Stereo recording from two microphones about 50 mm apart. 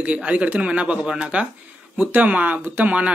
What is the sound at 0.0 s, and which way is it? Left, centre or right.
Speech, right.